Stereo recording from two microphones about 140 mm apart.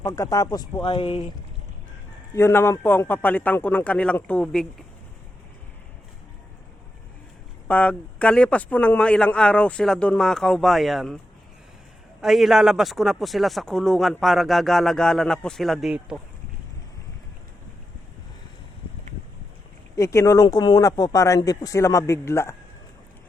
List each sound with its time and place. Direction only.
0.0 s speech: 25° left (ahead or behind)
2.3 s speech: 20° left (ahead or behind)
7.7 s speech: 10° left (ahead or behind)
12.2 s speech: centre (ahead or behind)
20.0 s speech: 20° left (ahead or behind)